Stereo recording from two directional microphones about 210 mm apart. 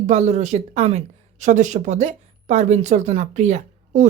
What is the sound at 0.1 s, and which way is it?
Speech, 30° right (ahead or behind).